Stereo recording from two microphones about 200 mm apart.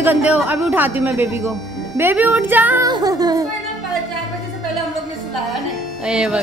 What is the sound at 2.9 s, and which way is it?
Child singing, 20° right (ahead or behind).